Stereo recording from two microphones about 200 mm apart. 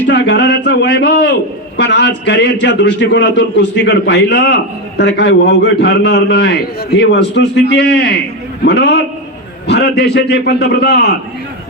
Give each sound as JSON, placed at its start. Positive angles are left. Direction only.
{"t": 0.1, "sound": "a man's voice", "side_deg": 65}